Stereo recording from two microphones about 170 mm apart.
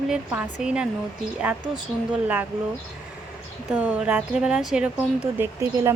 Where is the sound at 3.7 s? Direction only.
10° right (ahead or behind).